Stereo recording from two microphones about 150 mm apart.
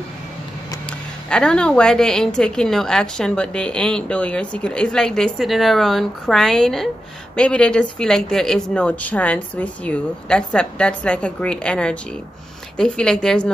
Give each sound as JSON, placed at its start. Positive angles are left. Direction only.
{"t": 1.3, "sound": "a woman's voice", "side_deg": 5}